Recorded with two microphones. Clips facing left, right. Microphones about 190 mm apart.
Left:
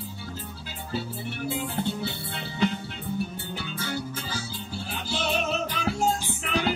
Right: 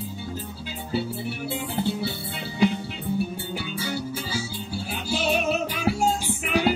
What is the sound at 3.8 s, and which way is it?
Music, 10° right (ahead or behind).